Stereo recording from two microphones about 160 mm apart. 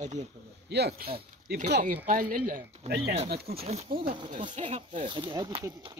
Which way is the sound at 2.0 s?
60° right (ahead or behind).